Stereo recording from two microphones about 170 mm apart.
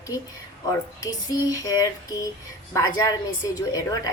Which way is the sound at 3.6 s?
20° left (ahead or behind).